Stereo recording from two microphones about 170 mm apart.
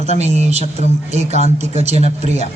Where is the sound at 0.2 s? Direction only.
40° right (ahead or behind).